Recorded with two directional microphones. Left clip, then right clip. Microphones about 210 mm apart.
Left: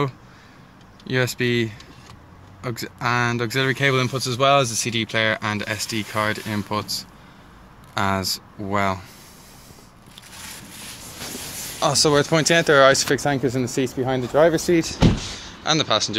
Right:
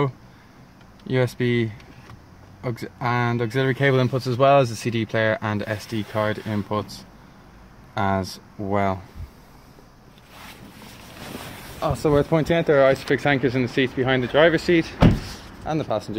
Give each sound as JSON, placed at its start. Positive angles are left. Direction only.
{"t": 1.0, "sound": "speech", "side_deg": -15}
{"t": 12.0, "sound": "speech", "side_deg": 0}